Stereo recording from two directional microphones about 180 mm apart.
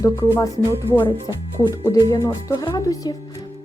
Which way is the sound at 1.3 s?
20° left (ahead or behind).